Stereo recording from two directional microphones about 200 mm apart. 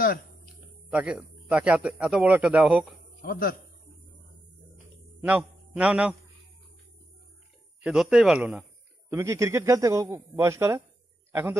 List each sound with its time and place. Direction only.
0.8 s a man's voice: 5° right (ahead or behind)
3.2 s a man's voice: 45° left (ahead or behind)
5.2 s a man's voice: 5° right (ahead or behind)
7.8 s a man's voice: 5° right (ahead or behind)
9.1 s a man's voice: 15° right (ahead or behind)